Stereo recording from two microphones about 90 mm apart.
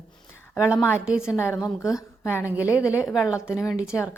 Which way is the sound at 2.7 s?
35° left (ahead or behind).